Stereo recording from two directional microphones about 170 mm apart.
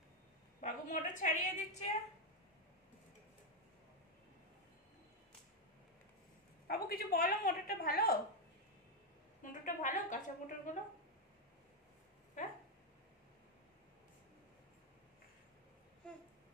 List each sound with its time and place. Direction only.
0.6 s a woman's voice: 50° left (ahead or behind)
6.7 s a woman's voice: 60° left (ahead or behind)
9.4 s a woman's voice: 50° left (ahead or behind)